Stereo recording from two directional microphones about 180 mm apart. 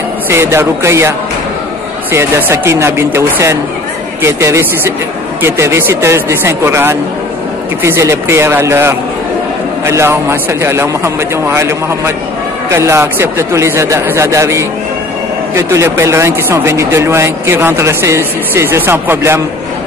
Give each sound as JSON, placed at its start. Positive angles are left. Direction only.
{"t": 0.3, "sound": "speech", "side_deg": -15}
{"t": 2.1, "sound": "speech", "side_deg": -15}